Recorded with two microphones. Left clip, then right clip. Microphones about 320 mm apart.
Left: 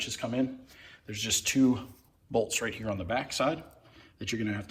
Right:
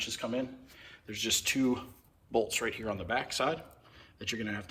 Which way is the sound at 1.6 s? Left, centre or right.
Centre.